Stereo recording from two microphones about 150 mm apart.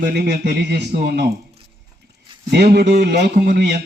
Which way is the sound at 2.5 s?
90° right.